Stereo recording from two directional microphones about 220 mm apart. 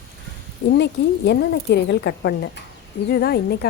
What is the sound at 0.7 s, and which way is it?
Speech, 50° left (ahead or behind).